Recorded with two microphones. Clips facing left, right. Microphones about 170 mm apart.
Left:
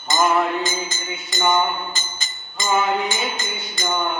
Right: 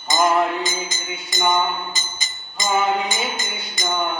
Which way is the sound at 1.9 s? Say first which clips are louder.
Even; 15° right (ahead or behind).